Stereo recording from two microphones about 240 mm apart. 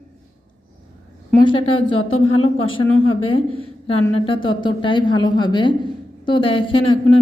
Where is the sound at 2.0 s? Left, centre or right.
Left.